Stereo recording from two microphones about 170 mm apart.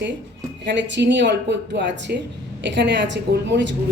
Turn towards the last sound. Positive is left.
turn(degrees=-90)